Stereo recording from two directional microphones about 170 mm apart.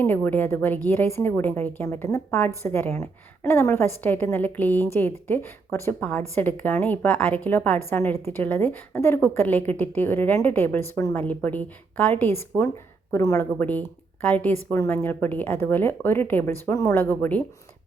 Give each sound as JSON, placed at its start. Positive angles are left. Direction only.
{"t": 0.0, "sound": "a woman's voice", "side_deg": 10}